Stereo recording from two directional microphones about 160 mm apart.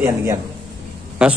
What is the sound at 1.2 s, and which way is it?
Speech, 5° right (ahead or behind).